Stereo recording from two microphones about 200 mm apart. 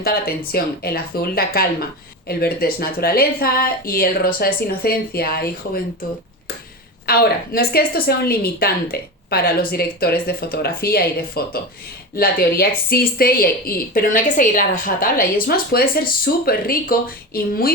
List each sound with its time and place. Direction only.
0.0 s speech: 50° left (ahead or behind)
7.1 s speech: 50° left (ahead or behind)